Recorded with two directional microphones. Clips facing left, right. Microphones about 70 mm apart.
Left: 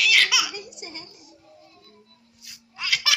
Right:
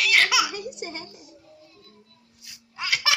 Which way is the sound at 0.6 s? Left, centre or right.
Right.